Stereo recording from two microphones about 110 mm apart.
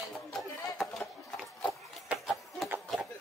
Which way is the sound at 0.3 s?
Centre (ahead or behind).